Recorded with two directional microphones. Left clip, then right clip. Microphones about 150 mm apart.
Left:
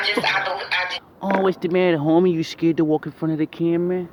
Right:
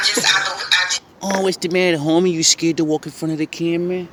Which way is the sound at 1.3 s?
15° right (ahead or behind).